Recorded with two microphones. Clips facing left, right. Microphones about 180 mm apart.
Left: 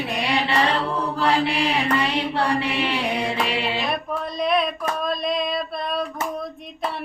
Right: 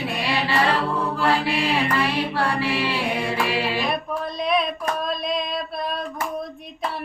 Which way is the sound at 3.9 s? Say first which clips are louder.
Even; centre (ahead or behind).